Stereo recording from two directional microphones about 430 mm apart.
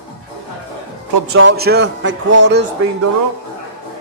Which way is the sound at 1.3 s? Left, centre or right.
Right.